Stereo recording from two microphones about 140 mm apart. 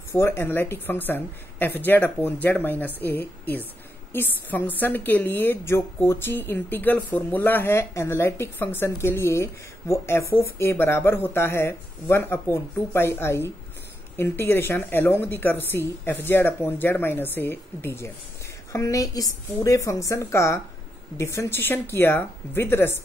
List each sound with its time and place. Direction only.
0.1 s a woman's voice: 20° left (ahead or behind)